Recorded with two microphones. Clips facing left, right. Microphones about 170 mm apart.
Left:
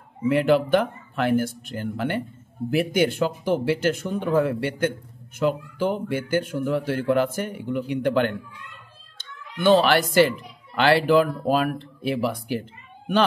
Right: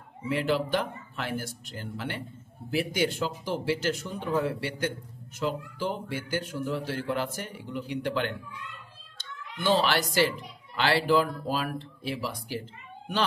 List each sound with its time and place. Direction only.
0.3 s a man's voice: 60° left (ahead or behind)